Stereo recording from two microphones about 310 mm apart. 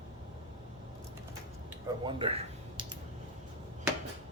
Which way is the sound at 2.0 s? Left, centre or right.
Centre.